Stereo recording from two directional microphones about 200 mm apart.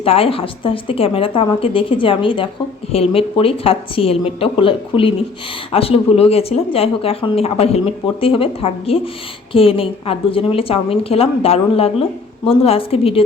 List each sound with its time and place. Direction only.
0.0 s speech: 30° left (ahead or behind)